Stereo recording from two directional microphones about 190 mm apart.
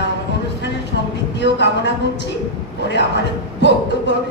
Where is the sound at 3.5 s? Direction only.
70° left (ahead or behind).